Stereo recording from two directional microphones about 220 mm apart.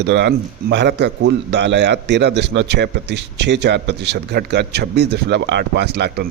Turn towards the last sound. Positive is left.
turn(degrees=-50)  # may be behind; listen again after turning